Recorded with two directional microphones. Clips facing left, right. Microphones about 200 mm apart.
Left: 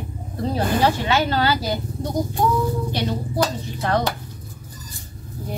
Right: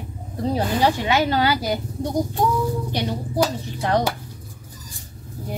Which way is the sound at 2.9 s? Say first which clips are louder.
Right 3 dB; 15° right (ahead or behind).